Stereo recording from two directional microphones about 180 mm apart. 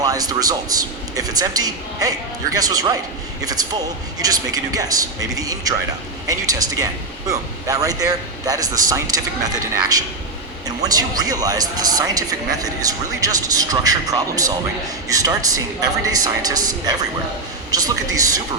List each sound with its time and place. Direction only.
0.0 s a man's voice: 20° right (ahead or behind)